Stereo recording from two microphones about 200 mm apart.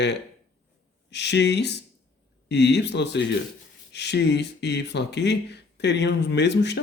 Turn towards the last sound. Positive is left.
turn(degrees=60)  # may be behind; listen again after turning